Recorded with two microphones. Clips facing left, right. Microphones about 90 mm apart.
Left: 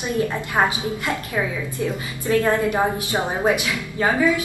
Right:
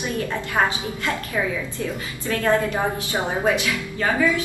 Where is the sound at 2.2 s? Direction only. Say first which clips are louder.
Left 2 dB; 20° left (ahead or behind).